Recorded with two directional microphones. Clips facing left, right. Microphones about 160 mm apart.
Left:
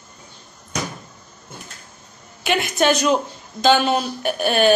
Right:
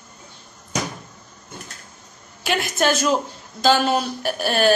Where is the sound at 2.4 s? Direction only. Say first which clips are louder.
Left 2 dB; centre (ahead or behind).